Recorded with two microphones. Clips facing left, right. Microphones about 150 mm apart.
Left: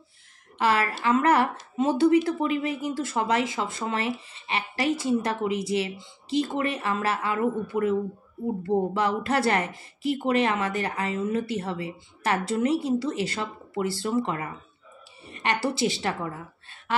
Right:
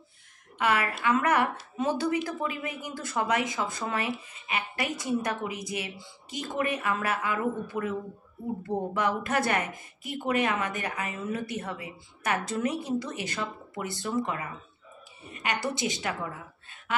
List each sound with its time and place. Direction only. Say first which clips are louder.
0.6 s a woman's voice: left 3 dB; 30° left (ahead or behind)
15.4 s a woman's voice: left 5 dB; 30° left (ahead or behind)